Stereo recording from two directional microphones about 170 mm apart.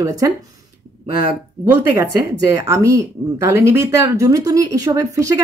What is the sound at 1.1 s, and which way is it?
Speech, 60° left (ahead or behind).